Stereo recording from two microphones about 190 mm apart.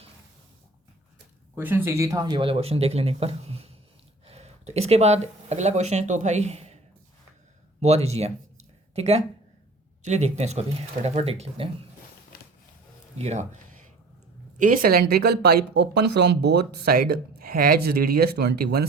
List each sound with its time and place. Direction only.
1.5 s speech: 10° right (ahead or behind); by 6.7 s 35° right (ahead or behind)
7.8 s speech: 35° right (ahead or behind)
12.3 s a sound: 50° left (ahead or behind)
13.1 s speech: 35° right (ahead or behind)
14.6 s speech: 50° right (ahead or behind)